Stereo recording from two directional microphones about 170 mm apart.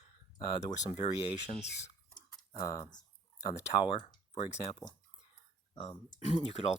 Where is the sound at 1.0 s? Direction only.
25° left (ahead or behind).